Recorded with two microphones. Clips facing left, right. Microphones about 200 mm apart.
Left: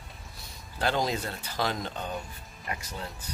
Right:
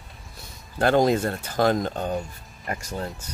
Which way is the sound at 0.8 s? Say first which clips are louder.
Right 9 dB; 55° right (ahead or behind).